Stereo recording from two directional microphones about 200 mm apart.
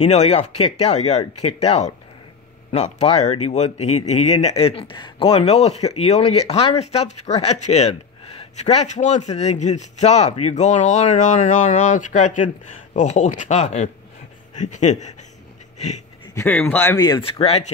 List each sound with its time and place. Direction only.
0.0 s speech: 35° left (ahead or behind)
16.3 s speech: 10° left (ahead or behind); by 17.6 s 30° left (ahead or behind)